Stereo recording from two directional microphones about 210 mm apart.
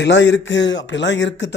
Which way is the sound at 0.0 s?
55° left (ahead or behind).